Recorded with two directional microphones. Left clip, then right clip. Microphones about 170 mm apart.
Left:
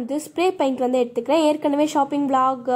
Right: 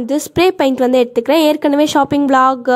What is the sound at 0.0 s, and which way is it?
A woman's voice, 40° right (ahead or behind).